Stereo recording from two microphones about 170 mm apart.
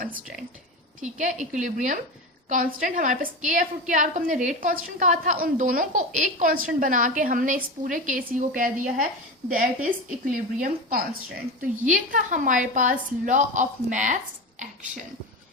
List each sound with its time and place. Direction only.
1.0 s a woman's voice: 45° right (ahead or behind)